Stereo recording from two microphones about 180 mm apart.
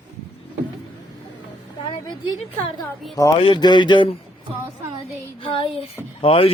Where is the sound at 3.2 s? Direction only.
25° left (ahead or behind).